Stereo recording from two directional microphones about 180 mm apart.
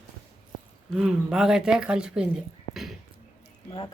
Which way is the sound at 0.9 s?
5° right (ahead or behind).